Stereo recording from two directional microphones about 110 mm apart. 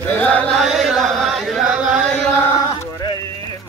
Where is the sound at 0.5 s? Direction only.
5° right (ahead or behind).